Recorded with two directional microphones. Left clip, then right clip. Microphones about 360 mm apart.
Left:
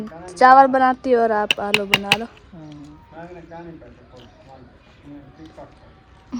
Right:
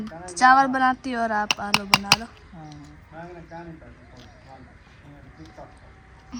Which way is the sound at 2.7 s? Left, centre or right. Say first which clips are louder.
Left 4 dB; right.